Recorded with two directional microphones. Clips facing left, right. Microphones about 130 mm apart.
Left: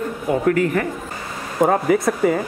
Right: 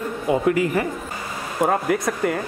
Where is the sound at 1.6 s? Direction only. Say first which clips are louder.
Left 4 dB; centre (ahead or behind).